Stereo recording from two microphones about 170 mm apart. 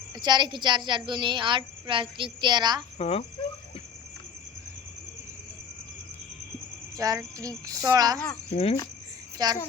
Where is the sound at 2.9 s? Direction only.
35° left (ahead or behind).